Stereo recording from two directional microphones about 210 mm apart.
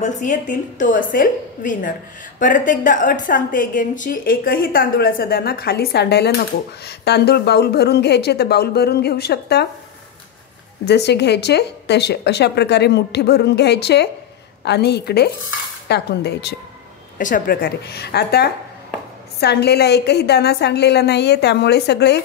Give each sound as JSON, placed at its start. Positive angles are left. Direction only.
{"t": 0.0, "sound": "a woman's voice", "side_deg": 35}
{"t": 10.9, "sound": "speech", "side_deg": 55}